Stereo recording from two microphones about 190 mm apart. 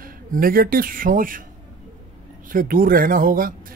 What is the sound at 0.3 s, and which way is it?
Speech, 50° right (ahead or behind).